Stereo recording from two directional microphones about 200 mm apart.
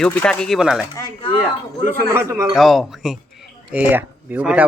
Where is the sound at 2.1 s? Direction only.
10° right (ahead or behind).